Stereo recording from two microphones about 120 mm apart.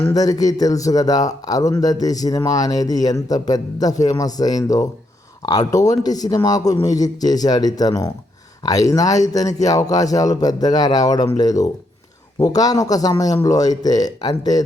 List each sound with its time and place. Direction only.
0.0 s speech: 30° left (ahead or behind)